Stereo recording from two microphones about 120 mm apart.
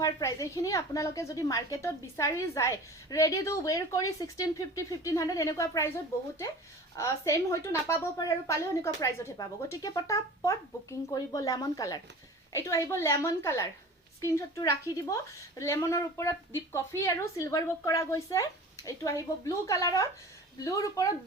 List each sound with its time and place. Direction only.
0.0 s a woman's voice: 30° left (ahead or behind)